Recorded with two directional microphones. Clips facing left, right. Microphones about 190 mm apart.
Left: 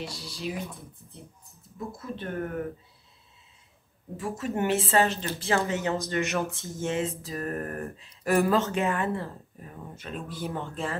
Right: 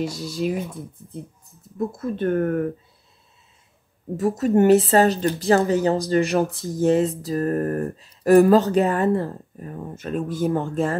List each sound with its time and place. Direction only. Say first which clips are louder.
0.0 s speech: right 12 dB; 45° right (ahead or behind)
2.0 s speech: right 12 dB; 50° right (ahead or behind)
4.2 s speech: right 11 dB; 40° right (ahead or behind)